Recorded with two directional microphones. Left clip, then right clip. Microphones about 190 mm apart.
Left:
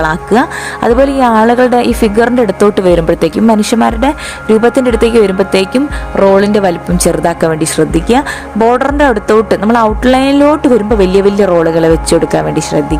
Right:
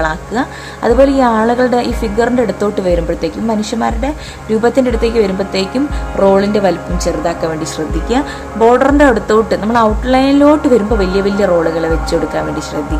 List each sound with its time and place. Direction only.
0.0 s speech: 40° left (ahead or behind)